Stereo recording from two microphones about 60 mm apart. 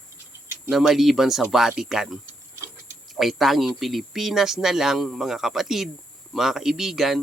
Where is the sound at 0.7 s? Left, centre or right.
Centre.